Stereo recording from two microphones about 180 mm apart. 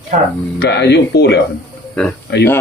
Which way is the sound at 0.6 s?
70° left (ahead or behind).